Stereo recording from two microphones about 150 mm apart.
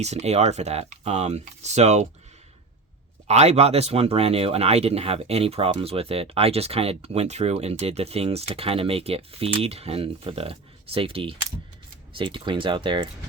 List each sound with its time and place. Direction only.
0.0 s speech: 45° right (ahead or behind)
3.2 s speech: 45° right (ahead or behind)